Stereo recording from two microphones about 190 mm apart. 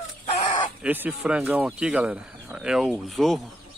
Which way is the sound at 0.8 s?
5° right (ahead or behind).